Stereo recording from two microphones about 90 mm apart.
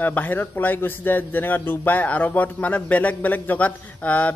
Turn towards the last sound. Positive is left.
turn(degrees=15)  # may be behind; listen again after turning